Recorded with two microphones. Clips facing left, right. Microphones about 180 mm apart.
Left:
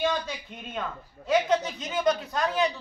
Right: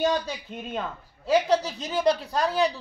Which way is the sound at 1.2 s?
35° right (ahead or behind).